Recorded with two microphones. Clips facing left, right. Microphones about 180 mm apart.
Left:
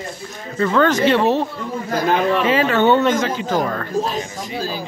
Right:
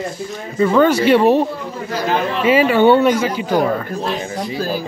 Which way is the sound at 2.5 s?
10° right (ahead or behind).